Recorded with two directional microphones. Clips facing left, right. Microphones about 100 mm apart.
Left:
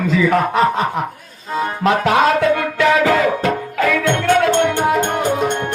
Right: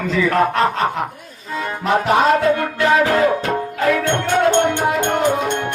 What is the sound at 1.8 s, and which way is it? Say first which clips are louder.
Music: left 1 dB; 90° left.